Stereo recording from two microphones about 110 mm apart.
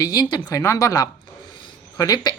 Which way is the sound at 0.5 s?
30° left (ahead or behind).